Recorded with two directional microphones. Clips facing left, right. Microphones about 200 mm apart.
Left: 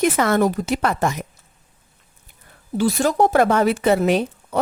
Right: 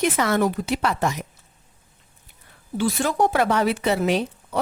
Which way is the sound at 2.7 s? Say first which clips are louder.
Left 4 dB; 40° left (ahead or behind).